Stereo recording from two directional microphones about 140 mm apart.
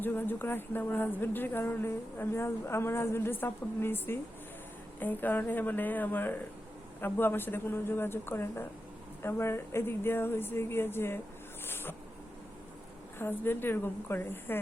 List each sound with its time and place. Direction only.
0.0 s speech: 15° left (ahead or behind)
11.6 s a sound: 15° left (ahead or behind)
13.1 s speech: 15° left (ahead or behind)